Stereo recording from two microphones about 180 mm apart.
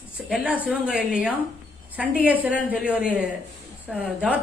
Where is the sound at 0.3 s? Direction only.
5° right (ahead or behind).